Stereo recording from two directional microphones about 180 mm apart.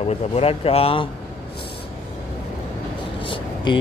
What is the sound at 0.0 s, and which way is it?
Speech, 35° left (ahead or behind).